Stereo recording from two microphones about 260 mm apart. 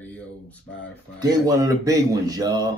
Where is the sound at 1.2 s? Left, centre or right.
Centre.